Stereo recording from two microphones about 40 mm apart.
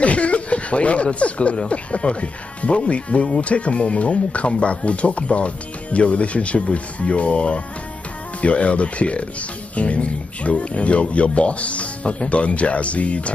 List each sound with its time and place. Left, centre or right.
0.0 s speech: left